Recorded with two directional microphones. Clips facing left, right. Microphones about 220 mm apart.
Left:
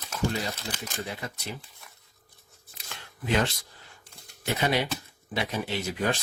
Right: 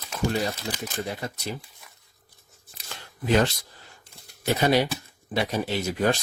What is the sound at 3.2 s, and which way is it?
Speech, 40° right (ahead or behind).